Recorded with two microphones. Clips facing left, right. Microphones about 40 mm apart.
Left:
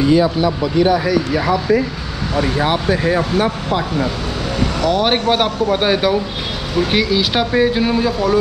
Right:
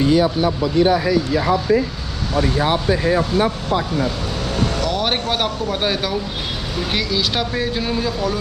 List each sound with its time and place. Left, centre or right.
0.1 s speech: left
4.8 s speech: centre